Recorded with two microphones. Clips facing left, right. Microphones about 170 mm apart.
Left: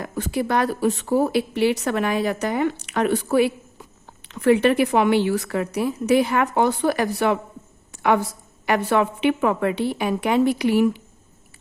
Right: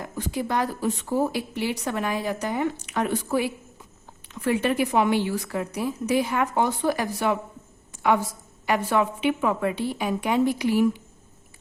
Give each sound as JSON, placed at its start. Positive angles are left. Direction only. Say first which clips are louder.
{"t": 0.0, "sound": "speech", "louder": "left 4 dB", "side_deg": 70}